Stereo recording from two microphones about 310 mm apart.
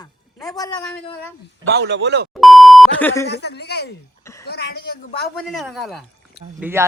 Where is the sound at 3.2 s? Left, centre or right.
Left.